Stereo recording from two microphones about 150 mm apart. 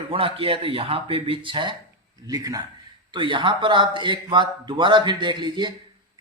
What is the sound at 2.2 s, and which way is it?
Speech, 25° right (ahead or behind).